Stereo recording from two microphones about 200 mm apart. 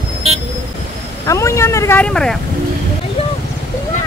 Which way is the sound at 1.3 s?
15° left (ahead or behind).